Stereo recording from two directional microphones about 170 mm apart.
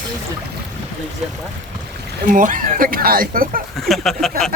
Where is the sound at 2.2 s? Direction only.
50° right (ahead or behind).